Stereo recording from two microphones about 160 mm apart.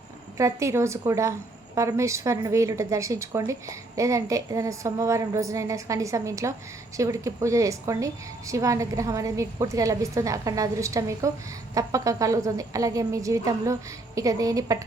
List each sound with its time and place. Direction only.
0.3 s a woman's voice: 20° right (ahead or behind)